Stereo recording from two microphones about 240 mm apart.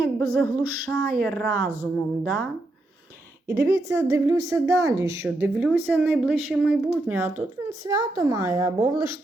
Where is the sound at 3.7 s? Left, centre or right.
Centre.